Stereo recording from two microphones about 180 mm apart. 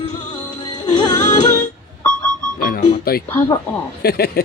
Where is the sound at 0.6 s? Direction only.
20° left (ahead or behind).